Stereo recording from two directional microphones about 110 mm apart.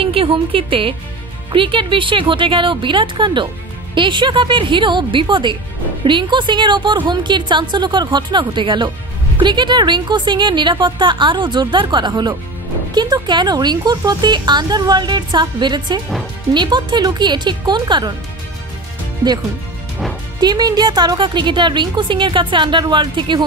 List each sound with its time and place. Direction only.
0.0 s a woman's voice: 55° right (ahead or behind)
19.2 s a woman's voice: 40° right (ahead or behind)